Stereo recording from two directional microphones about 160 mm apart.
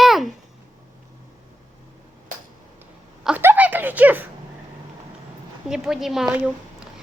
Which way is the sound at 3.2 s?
10° right (ahead or behind).